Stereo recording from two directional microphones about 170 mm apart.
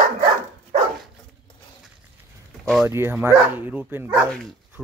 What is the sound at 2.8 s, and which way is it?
Speech, 15° right (ahead or behind).